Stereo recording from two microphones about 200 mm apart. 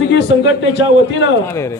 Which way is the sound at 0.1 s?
65° left (ahead or behind).